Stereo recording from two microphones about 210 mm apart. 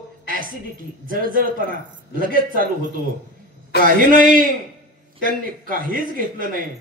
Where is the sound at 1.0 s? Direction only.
40° right (ahead or behind).